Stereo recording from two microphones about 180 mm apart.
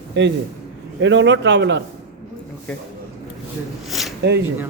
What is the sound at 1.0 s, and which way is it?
Speech, 90° right.